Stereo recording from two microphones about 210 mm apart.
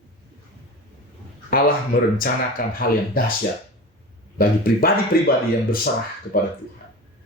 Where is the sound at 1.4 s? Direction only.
45° left (ahead or behind).